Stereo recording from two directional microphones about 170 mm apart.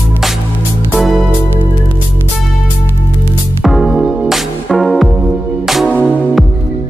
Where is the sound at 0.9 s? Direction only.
Centre (ahead or behind).